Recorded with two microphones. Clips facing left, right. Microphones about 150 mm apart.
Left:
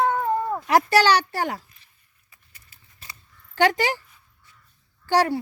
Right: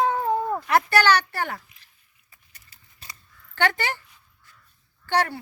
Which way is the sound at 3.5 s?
40° left (ahead or behind).